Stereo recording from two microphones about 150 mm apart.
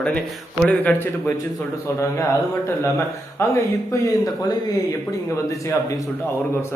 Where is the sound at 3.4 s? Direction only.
20° left (ahead or behind).